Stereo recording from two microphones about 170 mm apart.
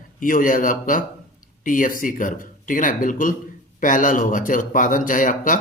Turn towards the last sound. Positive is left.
turn(degrees=50)  # may be behind; listen again after turning